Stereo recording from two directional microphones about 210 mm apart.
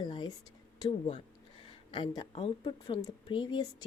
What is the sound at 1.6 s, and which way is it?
Speech, 25° left (ahead or behind).